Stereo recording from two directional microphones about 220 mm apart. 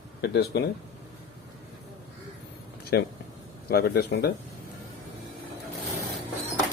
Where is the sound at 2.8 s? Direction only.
45° left (ahead or behind).